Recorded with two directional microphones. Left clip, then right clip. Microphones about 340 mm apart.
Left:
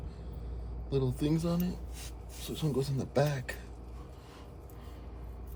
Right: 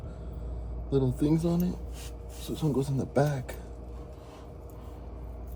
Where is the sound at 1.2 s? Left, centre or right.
Left.